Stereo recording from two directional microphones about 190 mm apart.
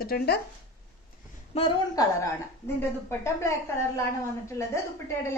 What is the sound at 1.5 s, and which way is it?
A woman's voice, 25° left (ahead or behind).